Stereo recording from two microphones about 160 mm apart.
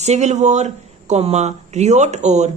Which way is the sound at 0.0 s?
45° right (ahead or behind).